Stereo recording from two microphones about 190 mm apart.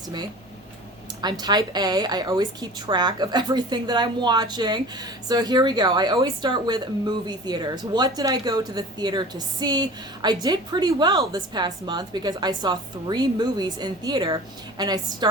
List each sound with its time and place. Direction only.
1.2 s a woman's voice: 20° right (ahead or behind)